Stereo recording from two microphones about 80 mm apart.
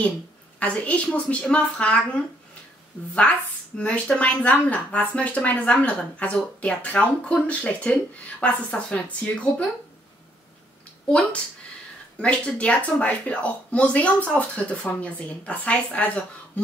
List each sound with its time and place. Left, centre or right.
0.6 s speech: centre
12.2 s speech: centre